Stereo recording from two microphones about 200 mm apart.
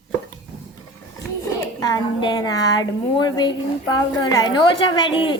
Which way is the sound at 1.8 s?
20° left (ahead or behind).